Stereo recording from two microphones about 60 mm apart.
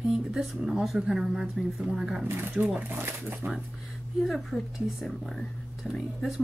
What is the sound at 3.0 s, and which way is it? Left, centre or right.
Speech, right.